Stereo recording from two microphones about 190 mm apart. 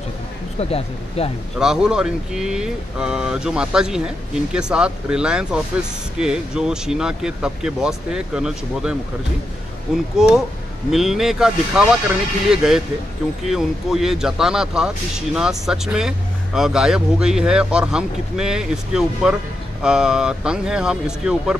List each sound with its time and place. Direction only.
0.6 s speech: 30° left (ahead or behind)
1.6 s speech: 5° right (ahead or behind)